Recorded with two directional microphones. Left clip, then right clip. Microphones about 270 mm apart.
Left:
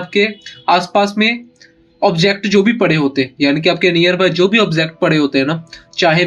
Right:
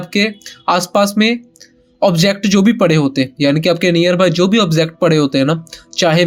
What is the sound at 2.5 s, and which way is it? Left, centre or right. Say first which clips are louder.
Speech: right 1 dB; right.